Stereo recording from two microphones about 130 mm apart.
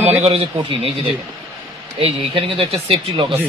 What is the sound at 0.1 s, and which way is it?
Speech, 50° right (ahead or behind).